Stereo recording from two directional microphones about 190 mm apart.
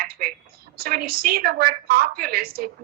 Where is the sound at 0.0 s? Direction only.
50° right (ahead or behind).